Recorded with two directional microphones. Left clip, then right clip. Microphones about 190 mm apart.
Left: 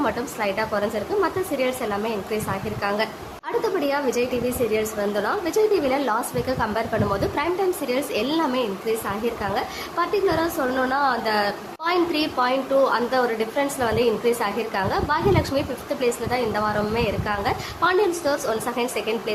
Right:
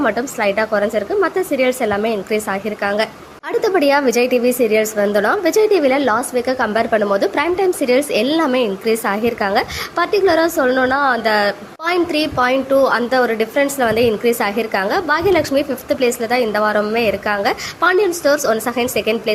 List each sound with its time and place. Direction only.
0.0 s a woman's voice: 20° right (ahead or behind)